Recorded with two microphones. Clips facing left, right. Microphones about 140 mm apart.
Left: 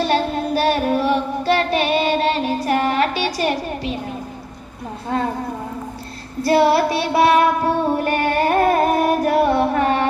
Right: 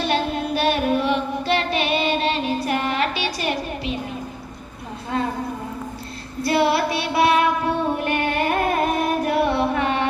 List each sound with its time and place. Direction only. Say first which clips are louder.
0.0 s child singing: left 3 dB; 35° left (ahead or behind)
2.6 s music: left 4 dB; 40° left (ahead or behind)
6.4 s child singing: left 4 dB; 40° left (ahead or behind)